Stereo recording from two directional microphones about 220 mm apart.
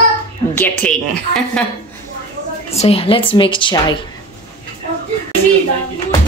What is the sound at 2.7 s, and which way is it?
A woman's voice, 25° left (ahead or behind).